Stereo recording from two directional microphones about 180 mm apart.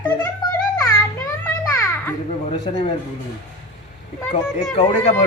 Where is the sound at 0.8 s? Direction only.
15° left (ahead or behind).